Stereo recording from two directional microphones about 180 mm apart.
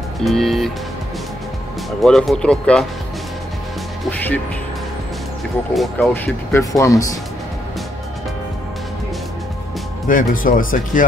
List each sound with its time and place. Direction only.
0.2 s speech: centre (ahead or behind)
2.0 s speech: centre (ahead or behind)
4.0 s music: 10° left (ahead or behind)
5.8 s speech: 5° left (ahead or behind)
6.5 s speech: 20° left (ahead or behind)
10.0 s speech: 50° left (ahead or behind)